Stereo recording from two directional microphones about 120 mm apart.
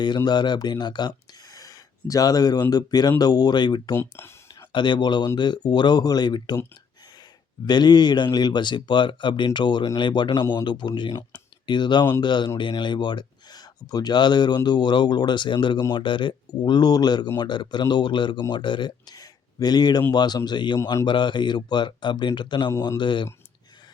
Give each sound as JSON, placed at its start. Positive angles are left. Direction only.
{"t": 0.3, "sound": "speech", "side_deg": 35}
{"t": 3.9, "sound": "speech", "side_deg": 20}
{"t": 4.7, "sound": "speech", "side_deg": 40}
{"t": 7.6, "sound": "speech", "side_deg": 35}